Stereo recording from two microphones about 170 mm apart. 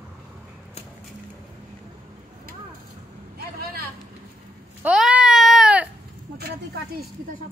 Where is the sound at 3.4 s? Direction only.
65° right (ahead or behind).